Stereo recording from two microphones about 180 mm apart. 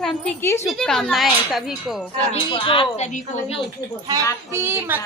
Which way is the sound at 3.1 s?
40° left (ahead or behind).